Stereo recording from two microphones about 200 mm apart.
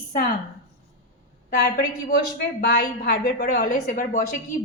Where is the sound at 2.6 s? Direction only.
50° left (ahead or behind).